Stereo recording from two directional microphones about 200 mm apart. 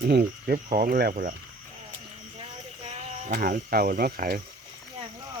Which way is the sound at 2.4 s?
35° right (ahead or behind).